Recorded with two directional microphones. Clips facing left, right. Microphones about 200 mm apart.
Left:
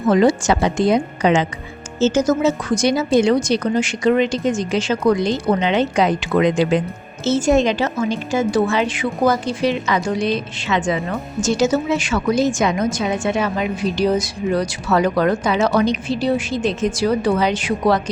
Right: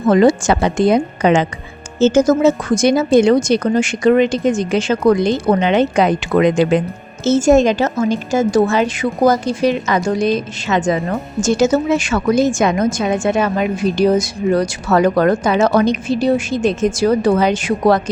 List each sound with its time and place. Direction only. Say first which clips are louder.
0.1 s a woman's voice: right 3 dB; 50° right (ahead or behind)